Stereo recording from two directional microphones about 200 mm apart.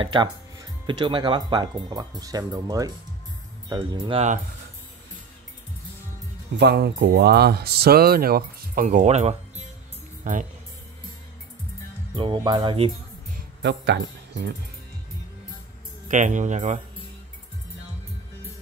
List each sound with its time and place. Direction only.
0.0 s speech: 25° right (ahead or behind)
6.6 s speech: 55° right (ahead or behind); by 9.4 s 35° right (ahead or behind)
12.2 s speech: 25° right (ahead or behind)
13.6 s speech: 60° right (ahead or behind)
16.1 s speech: 40° right (ahead or behind)